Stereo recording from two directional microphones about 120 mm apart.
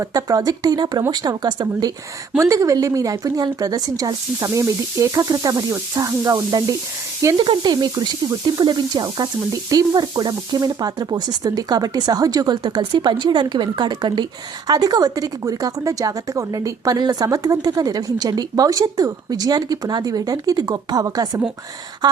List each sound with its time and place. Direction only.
0.0 s a woman's voice: 30° right (ahead or behind)
7.3 s a woman's voice: 40° right (ahead or behind)